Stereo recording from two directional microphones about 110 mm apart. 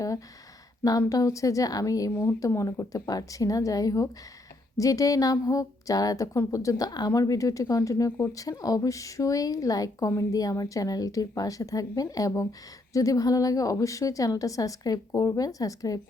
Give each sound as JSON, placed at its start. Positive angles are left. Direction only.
{"t": 0.9, "sound": "a woman's voice", "side_deg": 35}